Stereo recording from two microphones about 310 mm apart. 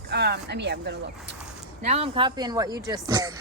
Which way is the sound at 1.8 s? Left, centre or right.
Centre.